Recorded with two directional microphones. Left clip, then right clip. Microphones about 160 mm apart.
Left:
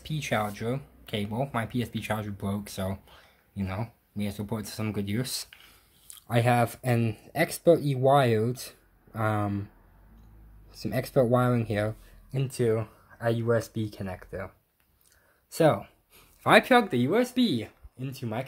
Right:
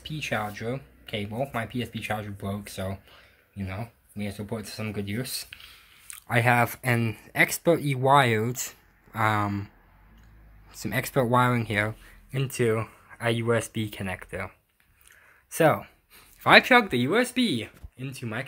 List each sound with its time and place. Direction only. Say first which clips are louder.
0.0 s speech: left 1 dB; 10° left (ahead or behind)
6.0 s speech: right 3 dB; centre (ahead or behind)
10.7 s speech: right 1 dB; 5° right (ahead or behind)
12.5 s speech: right 1 dB; 15° right (ahead or behind)
13.7 s speech: right 3 dB; 10° right (ahead or behind)
15.5 s a sound: right 1 dB; 5° left (ahead or behind)
16.8 s speech: right 1 dB; centre (ahead or behind)